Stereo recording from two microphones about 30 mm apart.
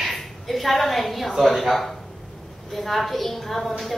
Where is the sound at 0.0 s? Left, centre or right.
Centre.